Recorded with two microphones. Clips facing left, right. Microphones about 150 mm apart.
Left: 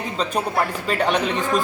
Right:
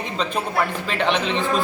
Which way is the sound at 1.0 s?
50° left (ahead or behind).